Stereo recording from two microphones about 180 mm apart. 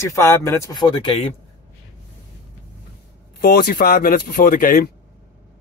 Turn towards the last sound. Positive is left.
turn(degrees=55)  # may be behind; listen again after turning